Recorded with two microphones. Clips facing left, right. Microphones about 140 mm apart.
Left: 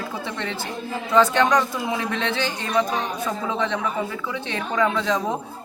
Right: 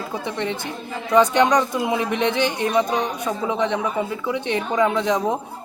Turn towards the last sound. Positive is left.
turn(degrees=-20)  # may be behind; listen again after turning